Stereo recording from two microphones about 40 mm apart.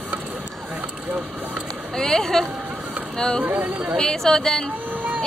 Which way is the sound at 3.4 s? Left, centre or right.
Right.